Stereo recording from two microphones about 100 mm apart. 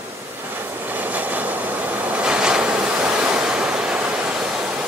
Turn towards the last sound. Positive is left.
turn(degrees=-5)  # may be behind; listen again after turning